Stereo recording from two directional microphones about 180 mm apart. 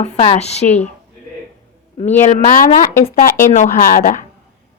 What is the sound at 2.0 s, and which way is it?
Speech, 40° left (ahead or behind).